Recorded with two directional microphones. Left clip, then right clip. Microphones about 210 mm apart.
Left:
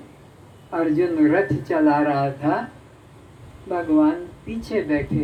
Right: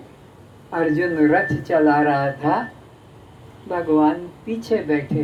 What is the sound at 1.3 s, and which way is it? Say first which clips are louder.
Speech: right 2 dB; 50° right (ahead or behind).